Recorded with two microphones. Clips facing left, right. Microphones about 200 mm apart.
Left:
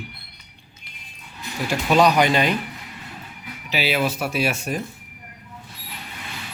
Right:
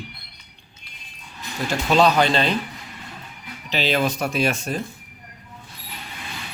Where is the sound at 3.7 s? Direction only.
10° left (ahead or behind).